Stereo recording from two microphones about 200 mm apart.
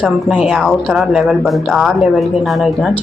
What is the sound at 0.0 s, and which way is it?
Speech, 5° right (ahead or behind).